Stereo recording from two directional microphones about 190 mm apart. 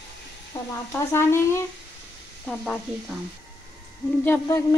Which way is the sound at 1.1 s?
15° left (ahead or behind).